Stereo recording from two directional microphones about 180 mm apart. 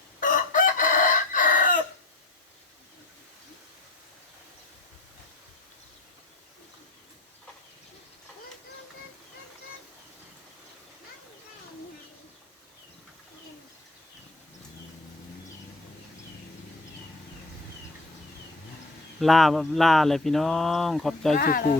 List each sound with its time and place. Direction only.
0.2 s chicken: 50° left (ahead or behind)
19.2 s speech: centre (ahead or behind)
21.3 s speech: 55° left (ahead or behind)